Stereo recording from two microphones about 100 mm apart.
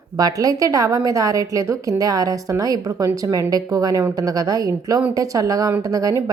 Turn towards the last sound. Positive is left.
turn(degrees=-35)  # may be behind; listen again after turning